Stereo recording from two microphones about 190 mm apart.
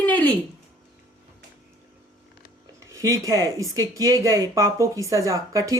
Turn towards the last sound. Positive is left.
turn(degrees=-15)  # may be behind; listen again after turning